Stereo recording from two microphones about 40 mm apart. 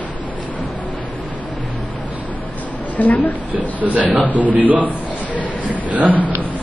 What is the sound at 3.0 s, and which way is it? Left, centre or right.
Speech, left.